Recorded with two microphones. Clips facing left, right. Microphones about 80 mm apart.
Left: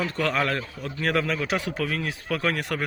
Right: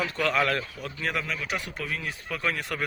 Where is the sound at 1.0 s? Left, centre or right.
Left.